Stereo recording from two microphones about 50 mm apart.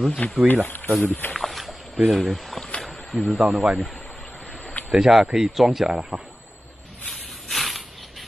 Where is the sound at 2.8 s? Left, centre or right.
Centre.